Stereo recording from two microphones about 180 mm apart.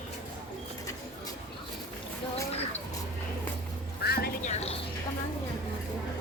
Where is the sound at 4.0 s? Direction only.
60° left (ahead or behind).